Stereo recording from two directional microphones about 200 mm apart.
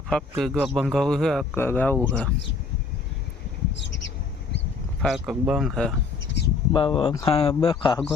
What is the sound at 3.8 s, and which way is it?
Bird, 65° left (ahead or behind).